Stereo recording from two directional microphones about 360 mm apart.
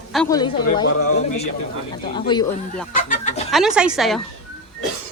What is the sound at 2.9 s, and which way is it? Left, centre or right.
Chicken, left.